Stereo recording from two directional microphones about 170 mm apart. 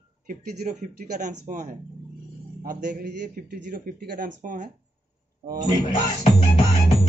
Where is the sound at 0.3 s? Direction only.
45° right (ahead or behind).